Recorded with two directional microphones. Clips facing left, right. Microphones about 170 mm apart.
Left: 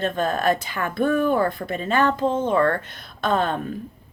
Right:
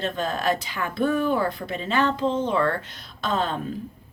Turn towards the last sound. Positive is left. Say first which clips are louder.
# left 4 dB
turn(degrees=55)  # may be behind; listen again after turning